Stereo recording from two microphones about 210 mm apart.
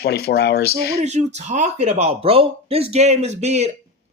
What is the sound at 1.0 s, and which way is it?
Speech, 35° right (ahead or behind).